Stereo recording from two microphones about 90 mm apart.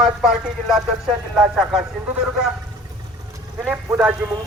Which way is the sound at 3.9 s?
10° right (ahead or behind).